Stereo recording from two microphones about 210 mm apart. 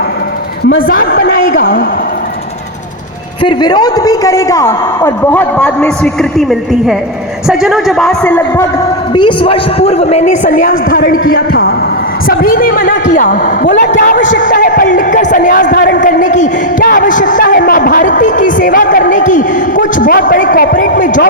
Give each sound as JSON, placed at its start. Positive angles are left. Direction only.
{"t": 0.8, "sound": "a man's voice", "side_deg": 45}
{"t": 3.4, "sound": "a man's voice", "side_deg": 20}
{"t": 9.1, "sound": "a man's voice", "side_deg": 25}